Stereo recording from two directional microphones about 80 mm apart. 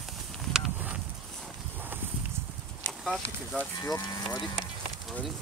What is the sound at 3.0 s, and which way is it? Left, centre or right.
Speech, centre.